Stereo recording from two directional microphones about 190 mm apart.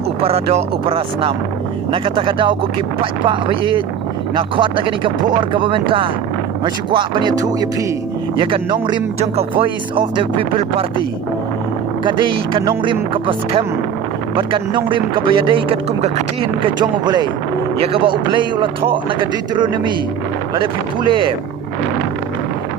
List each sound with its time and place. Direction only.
0.2 s speech: 30° right (ahead or behind)
12.0 s speech: 25° right (ahead or behind)